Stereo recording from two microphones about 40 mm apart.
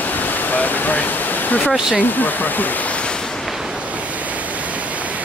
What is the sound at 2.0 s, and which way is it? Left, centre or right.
Speech, left.